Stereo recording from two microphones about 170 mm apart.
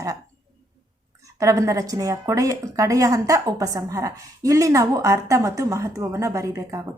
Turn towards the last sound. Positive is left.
turn(degrees=-20)  # may be behind; listen again after turning